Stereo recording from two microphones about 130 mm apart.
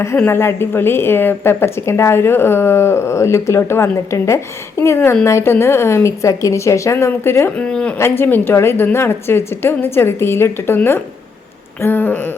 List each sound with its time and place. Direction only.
0.0 s a woman's voice: 20° left (ahead or behind)
7.9 s a woman's voice: 20° left (ahead or behind)
11.8 s a sound: 15° left (ahead or behind)